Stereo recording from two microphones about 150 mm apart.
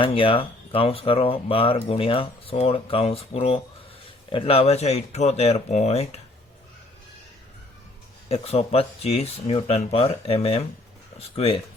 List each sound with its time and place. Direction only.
0.0 s speech: 35° left (ahead or behind)
8.3 s speech: 45° left (ahead or behind)